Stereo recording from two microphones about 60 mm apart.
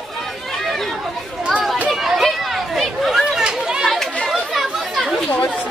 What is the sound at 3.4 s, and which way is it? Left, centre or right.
Chatter, centre.